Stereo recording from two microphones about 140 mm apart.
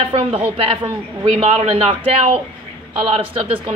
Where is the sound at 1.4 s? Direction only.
45° right (ahead or behind).